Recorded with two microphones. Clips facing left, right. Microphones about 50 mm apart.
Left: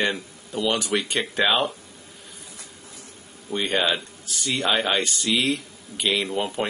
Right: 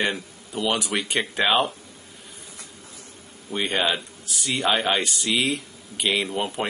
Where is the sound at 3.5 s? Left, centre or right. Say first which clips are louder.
Left 1 dB; centre.